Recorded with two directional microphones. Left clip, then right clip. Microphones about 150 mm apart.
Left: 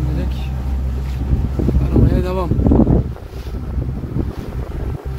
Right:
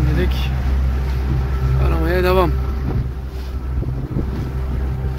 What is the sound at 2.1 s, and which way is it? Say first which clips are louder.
Vehicle: right 5 dB; 5° right (ahead or behind).